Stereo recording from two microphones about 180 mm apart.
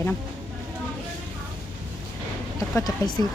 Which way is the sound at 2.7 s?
20° left (ahead or behind).